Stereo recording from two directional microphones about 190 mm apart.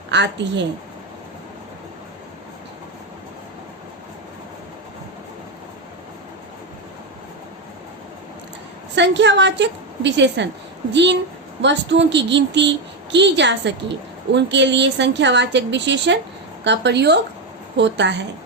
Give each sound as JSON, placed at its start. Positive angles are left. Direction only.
{"t": 0.1, "sound": "a woman's voice", "side_deg": -70}
{"t": 9.0, "sound": "a woman's voice", "side_deg": -65}